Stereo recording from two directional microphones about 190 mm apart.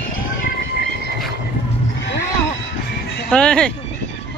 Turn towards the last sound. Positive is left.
turn(degrees=5)  # may be behind; listen again after turning